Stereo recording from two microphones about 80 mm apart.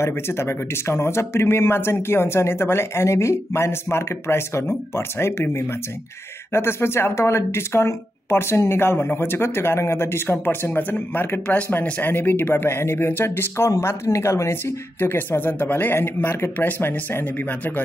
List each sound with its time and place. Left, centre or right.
0.0 s a woman's voice: left